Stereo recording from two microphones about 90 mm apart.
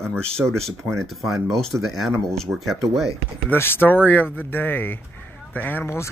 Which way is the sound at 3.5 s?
25° left (ahead or behind).